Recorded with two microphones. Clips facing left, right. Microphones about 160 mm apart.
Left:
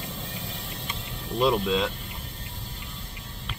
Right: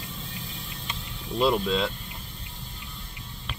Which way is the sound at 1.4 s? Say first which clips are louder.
Even; 10° left (ahead or behind).